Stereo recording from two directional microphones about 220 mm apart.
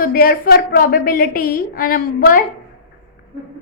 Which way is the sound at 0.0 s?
40° left (ahead or behind).